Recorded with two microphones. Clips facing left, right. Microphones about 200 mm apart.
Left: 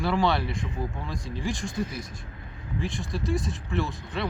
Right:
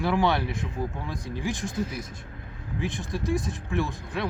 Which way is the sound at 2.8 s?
15° right (ahead or behind).